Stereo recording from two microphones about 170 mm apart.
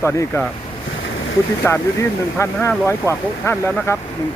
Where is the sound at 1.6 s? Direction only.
15° left (ahead or behind).